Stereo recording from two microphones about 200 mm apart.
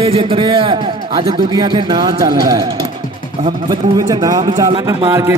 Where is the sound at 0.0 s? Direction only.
30° right (ahead or behind).